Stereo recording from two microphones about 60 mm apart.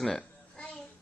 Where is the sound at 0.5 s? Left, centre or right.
Left.